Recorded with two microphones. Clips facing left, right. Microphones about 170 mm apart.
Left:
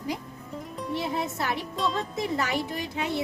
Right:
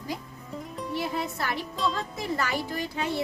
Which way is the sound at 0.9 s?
20° left (ahead or behind).